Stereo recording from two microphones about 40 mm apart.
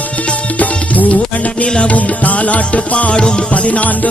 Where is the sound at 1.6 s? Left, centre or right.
Left.